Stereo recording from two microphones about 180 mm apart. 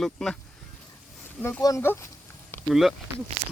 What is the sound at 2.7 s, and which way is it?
Speech, centre (ahead or behind).